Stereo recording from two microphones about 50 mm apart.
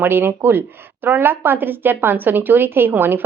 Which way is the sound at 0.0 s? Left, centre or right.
Right.